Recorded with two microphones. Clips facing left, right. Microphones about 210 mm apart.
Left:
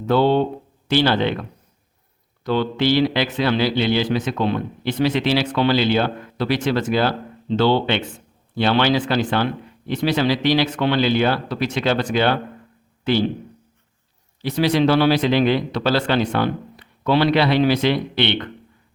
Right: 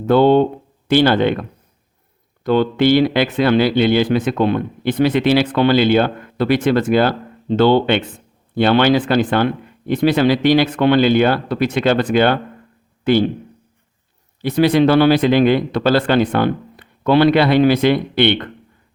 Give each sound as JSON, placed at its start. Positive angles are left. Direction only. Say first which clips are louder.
{"t": 0.0, "sound": "speech", "louder": "right 5 dB", "side_deg": -55}
{"t": 14.4, "sound": "speech", "louder": "right 4 dB", "side_deg": -55}